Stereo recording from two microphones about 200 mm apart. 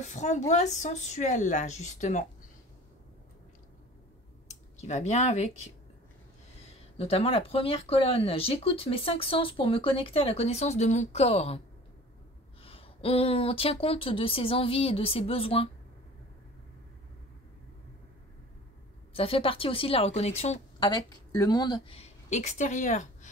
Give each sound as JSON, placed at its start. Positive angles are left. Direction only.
{"t": 0.0, "sound": "speech", "side_deg": 35}
{"t": 4.7, "sound": "speech", "side_deg": 35}
{"t": 7.0, "sound": "speech", "side_deg": 30}
{"t": 12.6, "sound": "speech", "side_deg": 30}
{"t": 19.1, "sound": "speech", "side_deg": 30}
{"t": 20.8, "sound": "a woman's voice", "side_deg": 20}